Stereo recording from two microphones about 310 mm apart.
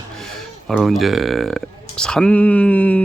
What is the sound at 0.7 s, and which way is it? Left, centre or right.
A man's voice, centre.